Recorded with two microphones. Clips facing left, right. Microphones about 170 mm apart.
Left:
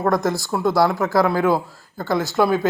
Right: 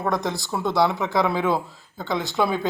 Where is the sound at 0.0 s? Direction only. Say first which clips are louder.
Left 5 dB; centre (ahead or behind).